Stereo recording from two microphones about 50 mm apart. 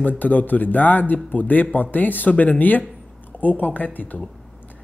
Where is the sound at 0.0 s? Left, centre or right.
Left.